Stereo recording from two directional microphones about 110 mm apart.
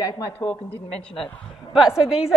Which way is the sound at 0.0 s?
30° left (ahead or behind).